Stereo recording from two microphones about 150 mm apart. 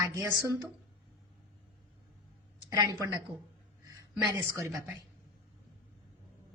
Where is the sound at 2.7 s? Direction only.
25° right (ahead or behind).